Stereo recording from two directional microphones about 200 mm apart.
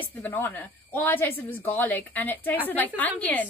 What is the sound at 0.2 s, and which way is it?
Speech, 10° left (ahead or behind).